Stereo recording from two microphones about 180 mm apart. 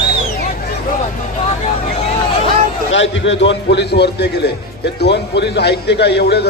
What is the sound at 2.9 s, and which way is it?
A man's voice, 90° left.